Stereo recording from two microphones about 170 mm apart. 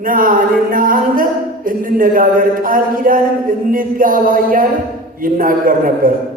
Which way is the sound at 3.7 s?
55° right (ahead or behind).